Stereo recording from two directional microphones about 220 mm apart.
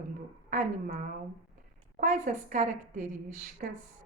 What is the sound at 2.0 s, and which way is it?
Speech, 35° right (ahead or behind).